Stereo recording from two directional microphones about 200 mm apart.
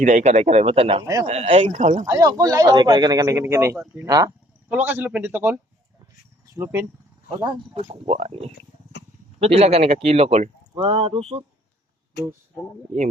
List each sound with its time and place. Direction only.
0.0 s speech: 35° right (ahead or behind)
2.0 s speech: 15° right (ahead or behind)
6.6 s speech: 10° right (ahead or behind)
7.4 s speech: 30° right (ahead or behind)